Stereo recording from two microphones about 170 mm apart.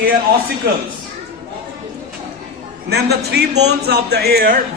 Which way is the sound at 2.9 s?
75° right (ahead or behind).